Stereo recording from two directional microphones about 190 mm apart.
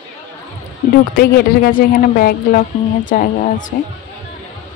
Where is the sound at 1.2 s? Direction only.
50° left (ahead or behind).